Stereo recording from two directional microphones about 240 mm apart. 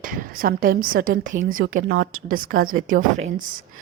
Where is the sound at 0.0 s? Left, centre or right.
Right.